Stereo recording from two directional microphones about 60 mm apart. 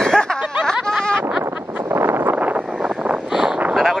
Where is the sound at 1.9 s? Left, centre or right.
Right.